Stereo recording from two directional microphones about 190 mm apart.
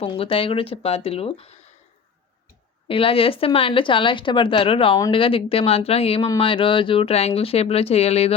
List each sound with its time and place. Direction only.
0.0 s speech: 30° left (ahead or behind)
2.8 s speech: 30° left (ahead or behind)